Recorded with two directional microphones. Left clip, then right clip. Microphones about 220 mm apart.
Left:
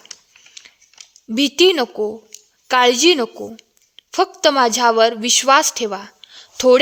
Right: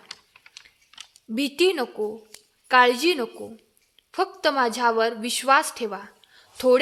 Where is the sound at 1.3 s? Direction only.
35° left (ahead or behind).